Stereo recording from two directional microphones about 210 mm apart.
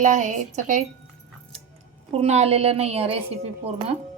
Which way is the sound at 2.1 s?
30° right (ahead or behind).